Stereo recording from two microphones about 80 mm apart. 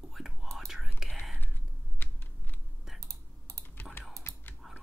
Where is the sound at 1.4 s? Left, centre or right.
Left.